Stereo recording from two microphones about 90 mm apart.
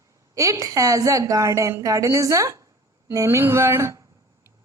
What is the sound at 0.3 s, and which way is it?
A woman's voice, 35° right (ahead or behind).